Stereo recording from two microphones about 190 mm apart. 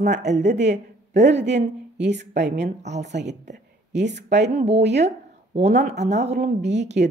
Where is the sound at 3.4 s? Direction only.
65° right (ahead or behind).